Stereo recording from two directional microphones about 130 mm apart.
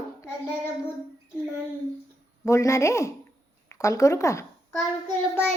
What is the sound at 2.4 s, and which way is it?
A child's voice, 25° left (ahead or behind).